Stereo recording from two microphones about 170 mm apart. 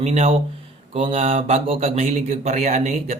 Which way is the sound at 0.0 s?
40° right (ahead or behind).